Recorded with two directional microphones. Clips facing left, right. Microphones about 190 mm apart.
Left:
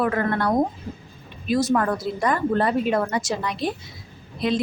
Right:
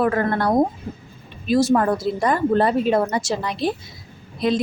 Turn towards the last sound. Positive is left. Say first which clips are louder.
# right 3 dB
turn(degrees=-40)  # may be behind; listen again after turning